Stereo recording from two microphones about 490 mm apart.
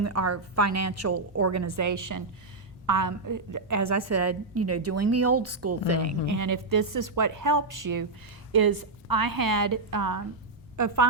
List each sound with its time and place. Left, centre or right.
0.0 s a woman's voice: right